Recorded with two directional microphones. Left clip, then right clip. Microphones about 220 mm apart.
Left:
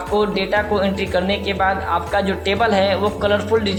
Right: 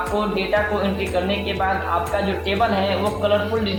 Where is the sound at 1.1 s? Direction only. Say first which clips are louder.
Left 3 dB; 50° left (ahead or behind).